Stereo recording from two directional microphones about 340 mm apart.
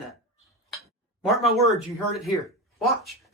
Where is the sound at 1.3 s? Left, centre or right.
Centre.